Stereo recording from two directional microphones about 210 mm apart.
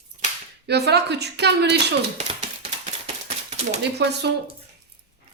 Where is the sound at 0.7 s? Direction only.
50° right (ahead or behind).